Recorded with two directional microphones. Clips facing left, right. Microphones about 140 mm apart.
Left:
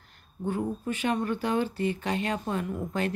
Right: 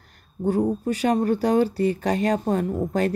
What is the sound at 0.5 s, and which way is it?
Speech, 40° right (ahead or behind).